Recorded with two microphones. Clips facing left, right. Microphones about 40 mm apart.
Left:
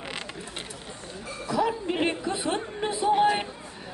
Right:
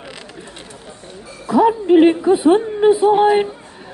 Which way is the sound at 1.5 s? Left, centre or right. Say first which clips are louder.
Right 14 dB; right.